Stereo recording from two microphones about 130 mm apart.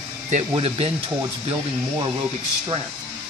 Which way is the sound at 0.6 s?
50° right (ahead or behind).